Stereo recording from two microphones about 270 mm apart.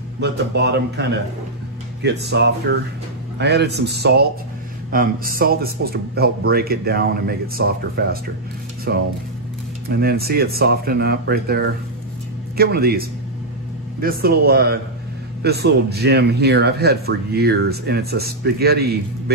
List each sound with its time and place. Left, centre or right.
0.2 s a man's voice: right
2.0 s a man's voice: right
14.0 s a man's voice: right